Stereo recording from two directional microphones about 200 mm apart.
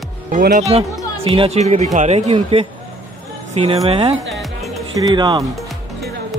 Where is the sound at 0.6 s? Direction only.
30° right (ahead or behind).